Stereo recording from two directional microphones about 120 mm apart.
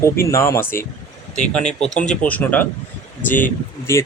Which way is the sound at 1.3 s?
70° left (ahead or behind).